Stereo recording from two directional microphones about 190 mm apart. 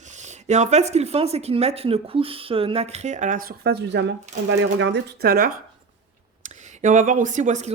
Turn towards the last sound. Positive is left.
turn(degrees=-40)  # may be behind; listen again after turning